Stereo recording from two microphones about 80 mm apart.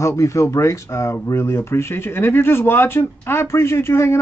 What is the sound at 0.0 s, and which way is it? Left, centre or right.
Speech, left.